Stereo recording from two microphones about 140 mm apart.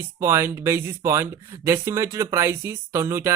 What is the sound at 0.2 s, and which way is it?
Speech, 20° right (ahead or behind).